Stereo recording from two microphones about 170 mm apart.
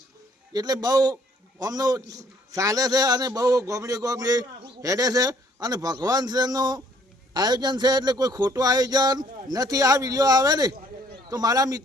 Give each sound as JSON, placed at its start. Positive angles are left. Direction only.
{"t": 0.5, "sound": "a man's voice", "side_deg": -25}